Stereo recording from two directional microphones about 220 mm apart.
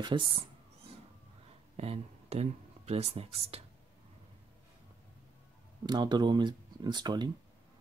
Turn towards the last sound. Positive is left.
turn(degrees=-20)  # may be behind; listen again after turning